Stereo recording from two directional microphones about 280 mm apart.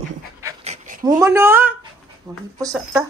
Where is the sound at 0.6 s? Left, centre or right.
Right.